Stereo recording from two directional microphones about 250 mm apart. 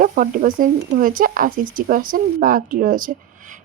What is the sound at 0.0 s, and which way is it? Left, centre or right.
Speech, right.